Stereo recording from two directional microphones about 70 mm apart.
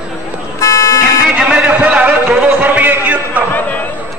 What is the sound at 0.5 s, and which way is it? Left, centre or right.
Vehicle, left.